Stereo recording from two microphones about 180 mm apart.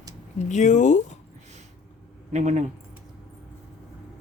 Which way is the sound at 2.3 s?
40° right (ahead or behind).